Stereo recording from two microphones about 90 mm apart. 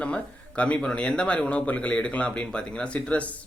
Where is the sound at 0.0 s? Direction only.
15° left (ahead or behind).